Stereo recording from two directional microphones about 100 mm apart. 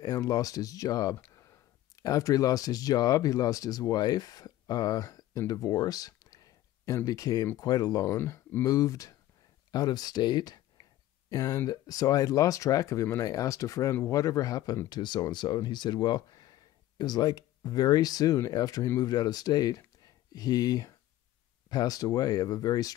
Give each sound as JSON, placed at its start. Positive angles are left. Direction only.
{"t": 0.0, "sound": "speech", "side_deg": 35}
{"t": 5.5, "sound": "a sound", "side_deg": 40}
{"t": 7.1, "sound": "speech", "side_deg": 40}
{"t": 8.6, "sound": "speech", "side_deg": 35}
{"t": 14.9, "sound": "speech", "side_deg": 50}